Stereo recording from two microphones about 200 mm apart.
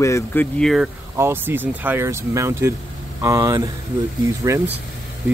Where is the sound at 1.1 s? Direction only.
10° right (ahead or behind).